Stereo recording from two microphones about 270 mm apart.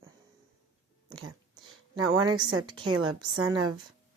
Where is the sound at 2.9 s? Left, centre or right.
Right.